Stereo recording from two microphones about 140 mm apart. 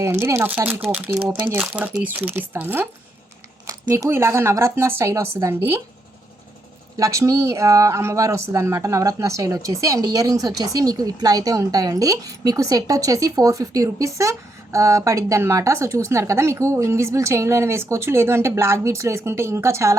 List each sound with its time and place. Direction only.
0.0 s speech: 20° right (ahead or behind)
6.9 s speech: 20° right (ahead or behind)